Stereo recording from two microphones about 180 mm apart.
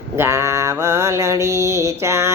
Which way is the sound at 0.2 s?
15° right (ahead or behind).